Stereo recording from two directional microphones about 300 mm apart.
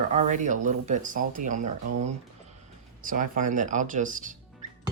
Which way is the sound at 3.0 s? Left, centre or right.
Right.